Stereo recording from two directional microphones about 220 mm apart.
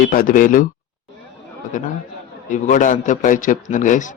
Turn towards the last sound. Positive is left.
turn(degrees=35)  # may be behind; listen again after turning